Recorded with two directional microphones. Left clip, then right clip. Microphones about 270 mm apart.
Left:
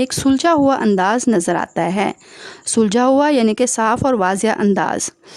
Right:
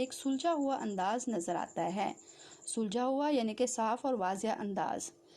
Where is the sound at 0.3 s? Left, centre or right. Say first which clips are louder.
Left 19 dB; left.